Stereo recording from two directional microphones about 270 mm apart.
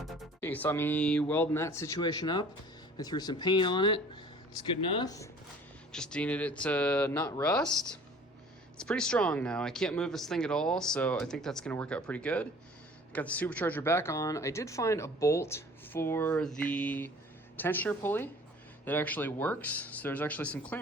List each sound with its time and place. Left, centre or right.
0.0 s speech: centre
8.8 s speech: centre